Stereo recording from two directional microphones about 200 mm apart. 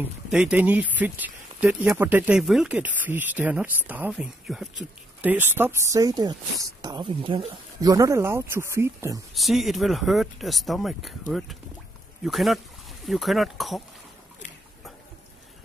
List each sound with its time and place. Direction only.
0.0 s speech: 5° right (ahead or behind)
9.3 s speech: centre (ahead or behind)